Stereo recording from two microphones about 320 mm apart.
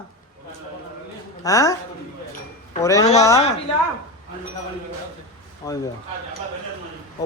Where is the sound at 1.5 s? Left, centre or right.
Centre.